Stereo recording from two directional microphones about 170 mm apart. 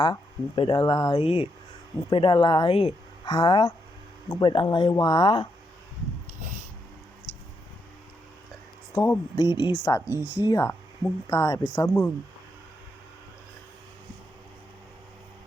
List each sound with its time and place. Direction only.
0.0 s speech: 30° left (ahead or behind)
9.0 s speech: 20° left (ahead or behind)
10.1 s speech: 10° right (ahead or behind)
10.4 s speech: 20° left (ahead or behind)